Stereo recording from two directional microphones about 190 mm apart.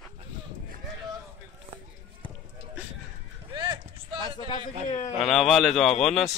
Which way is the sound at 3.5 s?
20° right (ahead or behind).